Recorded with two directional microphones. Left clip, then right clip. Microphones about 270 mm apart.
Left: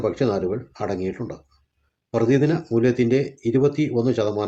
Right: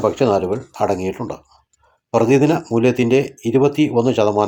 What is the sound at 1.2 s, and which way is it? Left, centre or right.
Speech, right.